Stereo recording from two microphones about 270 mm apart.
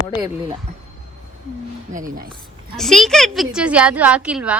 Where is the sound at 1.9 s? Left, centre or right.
Right.